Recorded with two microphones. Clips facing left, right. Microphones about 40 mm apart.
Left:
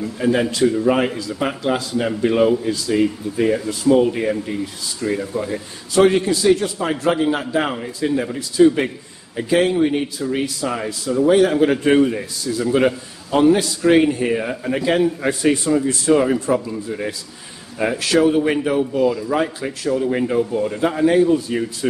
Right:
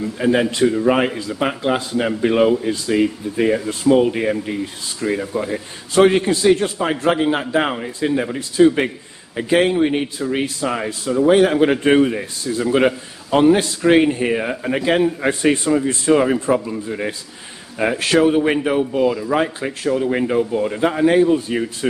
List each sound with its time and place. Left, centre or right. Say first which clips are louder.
0.2 s a man's voice: right 1 dB; right
9.7 s a man's voice: even; right